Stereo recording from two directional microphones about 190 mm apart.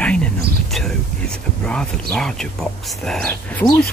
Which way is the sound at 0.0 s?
5° left (ahead or behind).